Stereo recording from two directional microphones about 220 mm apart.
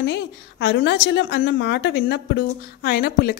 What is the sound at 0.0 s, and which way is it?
A woman's voice, 50° left (ahead or behind).